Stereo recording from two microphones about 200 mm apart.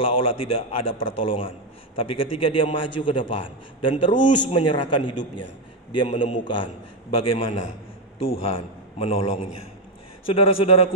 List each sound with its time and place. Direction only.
0.0 s a man's voice: 30° left (ahead or behind)